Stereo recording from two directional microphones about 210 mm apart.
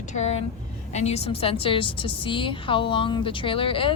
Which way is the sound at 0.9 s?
30° left (ahead or behind).